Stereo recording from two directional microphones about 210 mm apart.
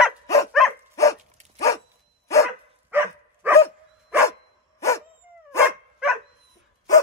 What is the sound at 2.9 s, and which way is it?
Dog, 10° right (ahead or behind).